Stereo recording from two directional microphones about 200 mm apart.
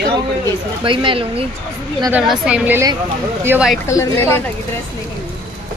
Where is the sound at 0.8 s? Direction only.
25° right (ahead or behind).